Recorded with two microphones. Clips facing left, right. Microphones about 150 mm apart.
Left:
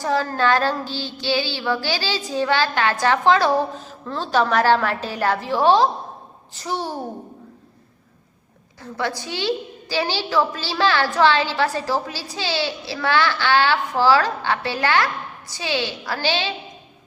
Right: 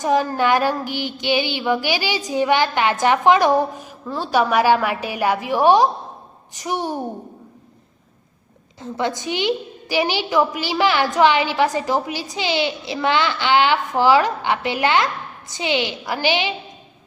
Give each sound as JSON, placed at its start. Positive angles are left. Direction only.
{"t": 0.0, "sound": "a woman's voice", "side_deg": -15}
{"t": 8.8, "sound": "a woman's voice", "side_deg": -20}